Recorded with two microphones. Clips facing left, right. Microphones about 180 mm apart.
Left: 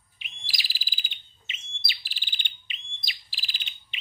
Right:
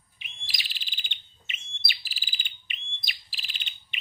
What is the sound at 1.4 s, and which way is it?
Bird, 55° right (ahead or behind).